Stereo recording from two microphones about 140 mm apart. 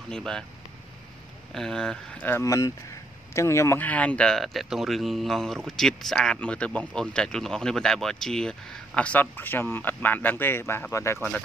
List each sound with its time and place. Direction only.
0.1 s speech: 5° left (ahead or behind)
1.5 s speech: 5° left (ahead or behind)
2.1 s speech: 15° left (ahead or behind)